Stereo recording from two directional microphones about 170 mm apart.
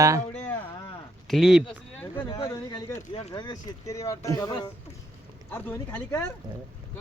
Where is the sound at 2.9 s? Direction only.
40° left (ahead or behind).